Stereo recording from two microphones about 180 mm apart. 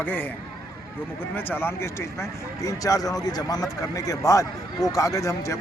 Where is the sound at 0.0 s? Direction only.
10° left (ahead or behind).